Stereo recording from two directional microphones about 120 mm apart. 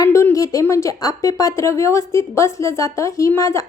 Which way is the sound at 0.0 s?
20° left (ahead or behind).